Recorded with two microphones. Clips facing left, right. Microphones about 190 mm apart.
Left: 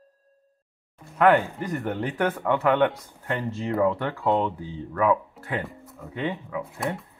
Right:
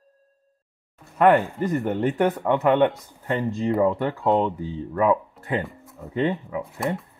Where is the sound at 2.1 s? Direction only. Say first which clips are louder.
Even; 15° right (ahead or behind).